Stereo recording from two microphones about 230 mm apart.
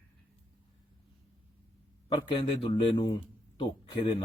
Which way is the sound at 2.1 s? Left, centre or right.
Centre.